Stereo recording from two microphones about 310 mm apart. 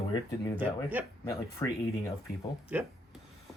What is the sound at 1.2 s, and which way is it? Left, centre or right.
Speech, centre.